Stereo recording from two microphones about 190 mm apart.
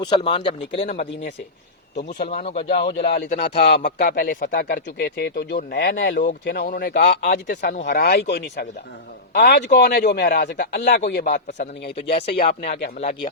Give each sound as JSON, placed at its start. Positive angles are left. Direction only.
{"t": 0.0, "sound": "a man's voice", "side_deg": 25}
{"t": 2.0, "sound": "speech", "side_deg": 60}
{"t": 2.5, "sound": "speech", "side_deg": 35}
{"t": 2.8, "sound": "speech", "side_deg": 60}
{"t": 3.3, "sound": "speech", "side_deg": 35}
{"t": 4.0, "sound": "speech", "side_deg": 50}
{"t": 11.6, "sound": "speech", "side_deg": 35}
{"t": 12.4, "sound": "speech", "side_deg": 55}